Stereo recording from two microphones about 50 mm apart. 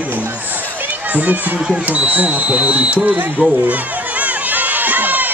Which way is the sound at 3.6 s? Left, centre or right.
Right.